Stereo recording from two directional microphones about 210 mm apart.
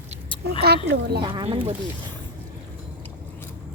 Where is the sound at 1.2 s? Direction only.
25° right (ahead or behind).